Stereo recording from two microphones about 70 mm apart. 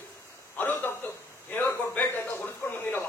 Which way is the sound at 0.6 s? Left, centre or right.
Left.